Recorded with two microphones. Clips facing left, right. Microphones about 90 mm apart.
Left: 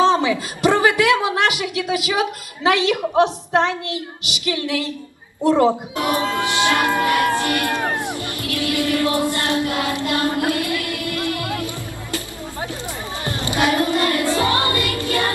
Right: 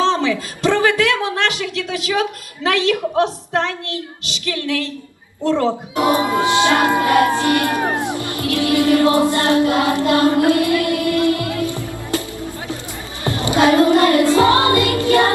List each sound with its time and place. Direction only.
0.0 s a woman's voice: 15° left (ahead or behind)
6.0 s music: 20° right (ahead or behind)
11.4 s music: 25° left (ahead or behind)
13.5 s child singing: 25° right (ahead or behind)
14.3 s music: 25° right (ahead or behind)